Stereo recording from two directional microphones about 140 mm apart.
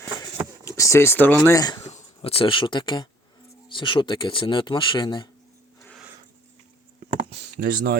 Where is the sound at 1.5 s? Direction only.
30° left (ahead or behind).